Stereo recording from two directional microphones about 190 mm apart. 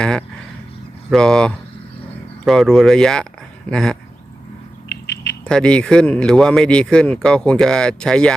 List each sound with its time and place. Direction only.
0.0 s speech: 5° left (ahead or behind)
4.9 s a sound: 60° left (ahead or behind)
5.5 s speech: 5° left (ahead or behind)